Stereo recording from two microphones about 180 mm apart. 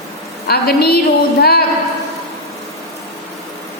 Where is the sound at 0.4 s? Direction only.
60° left (ahead or behind).